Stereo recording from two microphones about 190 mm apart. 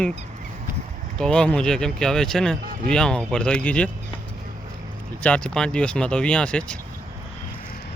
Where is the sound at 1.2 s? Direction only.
5° left (ahead or behind).